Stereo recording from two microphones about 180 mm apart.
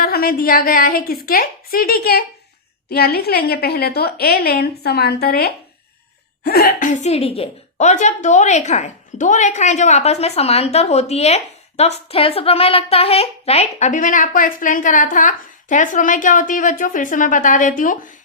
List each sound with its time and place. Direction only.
0.0 s a woman's voice: 55° left (ahead or behind)